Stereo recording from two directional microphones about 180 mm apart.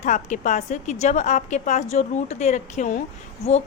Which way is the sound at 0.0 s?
45° left (ahead or behind).